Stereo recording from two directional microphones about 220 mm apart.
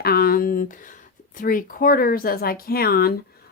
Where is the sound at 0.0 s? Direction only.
45° left (ahead or behind).